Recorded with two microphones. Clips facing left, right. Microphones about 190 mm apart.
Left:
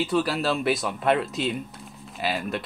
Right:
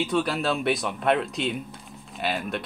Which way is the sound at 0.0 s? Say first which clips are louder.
Left 1 dB; centre (ahead or behind).